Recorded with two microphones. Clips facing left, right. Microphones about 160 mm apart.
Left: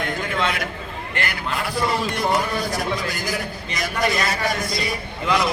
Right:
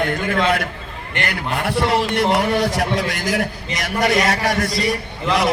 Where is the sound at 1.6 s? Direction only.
75° right (ahead or behind); by 4.9 s 90° right.